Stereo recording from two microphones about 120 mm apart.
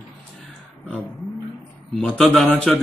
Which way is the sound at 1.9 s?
5° left (ahead or behind).